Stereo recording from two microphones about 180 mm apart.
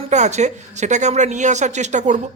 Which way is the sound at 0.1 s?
40° right (ahead or behind).